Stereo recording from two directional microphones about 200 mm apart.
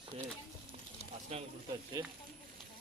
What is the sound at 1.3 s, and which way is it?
Speech, 35° right (ahead or behind).